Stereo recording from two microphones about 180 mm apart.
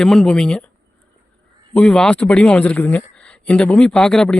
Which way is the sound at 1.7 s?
5° left (ahead or behind).